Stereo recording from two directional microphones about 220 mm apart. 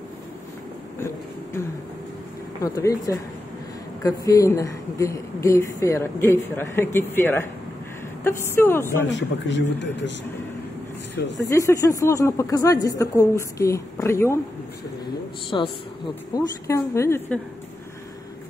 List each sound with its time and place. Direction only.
0.9 s a sound: 10° left (ahead or behind)
2.6 s speech: 15° left (ahead or behind)
9.1 s speech: 55° left (ahead or behind)
11.1 s speech: 55° left (ahead or behind)
11.4 s speech: 15° left (ahead or behind)
16.3 s speech: 15° left (ahead or behind)